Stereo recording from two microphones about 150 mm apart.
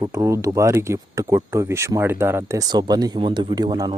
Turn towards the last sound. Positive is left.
turn(degrees=-30)  # may be behind; listen again after turning